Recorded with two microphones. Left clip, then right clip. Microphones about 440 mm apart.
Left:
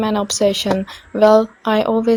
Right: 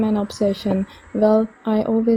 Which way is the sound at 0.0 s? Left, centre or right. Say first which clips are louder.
Left 5 dB; centre.